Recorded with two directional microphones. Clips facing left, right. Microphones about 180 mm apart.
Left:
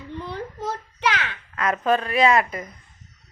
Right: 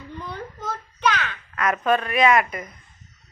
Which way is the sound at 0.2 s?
30° left (ahead or behind).